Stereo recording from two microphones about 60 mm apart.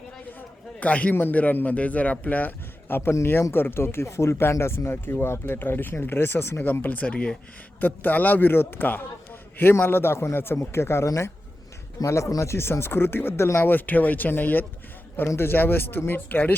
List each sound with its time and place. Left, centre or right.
0.8 s speech: left
2.9 s a man's voice: left
6.8 s a man's voice: left
11.9 s speech: left
13.6 s a man's voice: left